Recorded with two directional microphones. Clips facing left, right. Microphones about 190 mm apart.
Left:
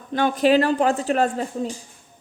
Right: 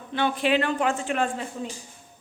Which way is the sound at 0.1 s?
40° left (ahead or behind).